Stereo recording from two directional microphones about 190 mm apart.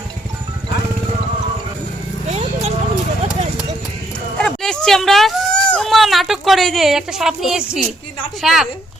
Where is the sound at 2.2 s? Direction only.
35° right (ahead or behind).